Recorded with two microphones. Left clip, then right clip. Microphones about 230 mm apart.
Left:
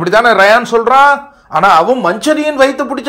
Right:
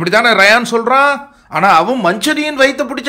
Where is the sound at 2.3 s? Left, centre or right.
Centre.